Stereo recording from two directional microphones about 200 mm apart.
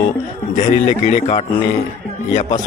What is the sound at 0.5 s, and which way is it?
A man's voice, 35° left (ahead or behind).